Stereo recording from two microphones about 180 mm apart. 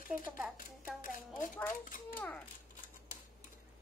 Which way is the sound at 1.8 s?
50° left (ahead or behind).